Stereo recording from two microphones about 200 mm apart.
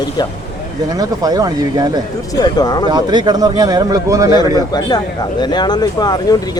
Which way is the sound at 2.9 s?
20° right (ahead or behind).